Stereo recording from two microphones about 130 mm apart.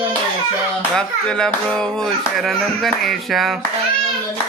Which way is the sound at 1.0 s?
5° left (ahead or behind).